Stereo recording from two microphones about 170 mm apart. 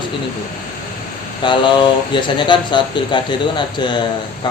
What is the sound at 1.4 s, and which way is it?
Speech, 30° left (ahead or behind).